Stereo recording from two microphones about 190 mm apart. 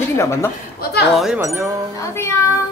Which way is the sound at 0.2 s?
15° left (ahead or behind).